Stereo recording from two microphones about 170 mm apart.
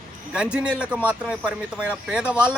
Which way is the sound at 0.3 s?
5° right (ahead or behind).